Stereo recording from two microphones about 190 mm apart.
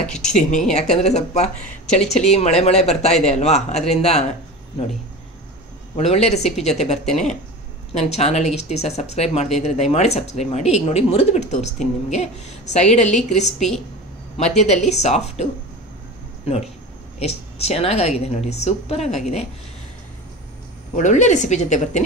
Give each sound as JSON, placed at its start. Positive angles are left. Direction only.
{"t": 0.3, "sound": "speech", "side_deg": 40}
{"t": 5.9, "sound": "speech", "side_deg": 35}
{"t": 7.1, "sound": "speech", "side_deg": 0}
{"t": 7.9, "sound": "speech", "side_deg": 35}
{"t": 17.2, "sound": "speech", "side_deg": 35}
{"t": 20.9, "sound": "speech", "side_deg": 40}